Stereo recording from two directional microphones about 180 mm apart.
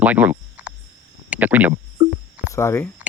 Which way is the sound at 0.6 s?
10° right (ahead or behind).